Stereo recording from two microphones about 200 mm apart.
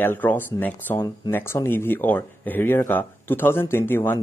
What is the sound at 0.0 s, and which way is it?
Speech, 10° left (ahead or behind).